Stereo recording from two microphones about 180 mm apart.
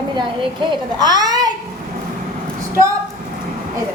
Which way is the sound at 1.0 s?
25° right (ahead or behind).